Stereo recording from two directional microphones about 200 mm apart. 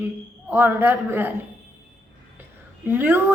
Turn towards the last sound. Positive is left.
turn(degrees=-10)  # may be behind; listen again after turning